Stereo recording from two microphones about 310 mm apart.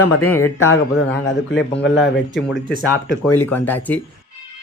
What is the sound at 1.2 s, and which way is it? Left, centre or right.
Speech, left.